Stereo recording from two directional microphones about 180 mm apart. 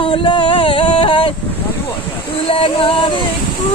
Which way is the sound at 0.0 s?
30° left (ahead or behind).